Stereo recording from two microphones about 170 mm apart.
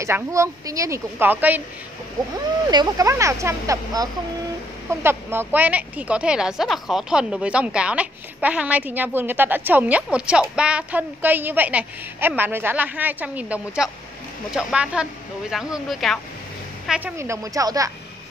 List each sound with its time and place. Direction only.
0.0 s a woman's voice: 15° right (ahead or behind)
2.7 s a woman's voice: 20° right (ahead or behind); by 17.1 s 5° right (ahead or behind)
17.2 s speech: 20° right (ahead or behind)